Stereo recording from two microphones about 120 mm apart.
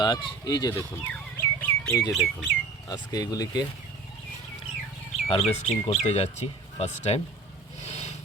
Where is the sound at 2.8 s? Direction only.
30° left (ahead or behind).